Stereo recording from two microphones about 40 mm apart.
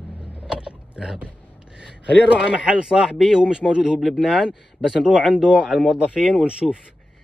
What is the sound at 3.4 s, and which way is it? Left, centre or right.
Speech, right.